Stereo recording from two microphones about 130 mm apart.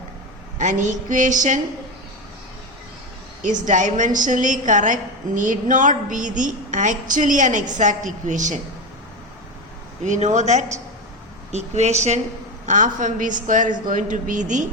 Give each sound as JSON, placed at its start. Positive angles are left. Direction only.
{"t": 0.6, "sound": "a woman's voice", "side_deg": -75}
{"t": 3.4, "sound": "a woman's voice", "side_deg": -75}
{"t": 10.0, "sound": "speech", "side_deg": -65}
{"t": 12.6, "sound": "a woman's voice", "side_deg": -75}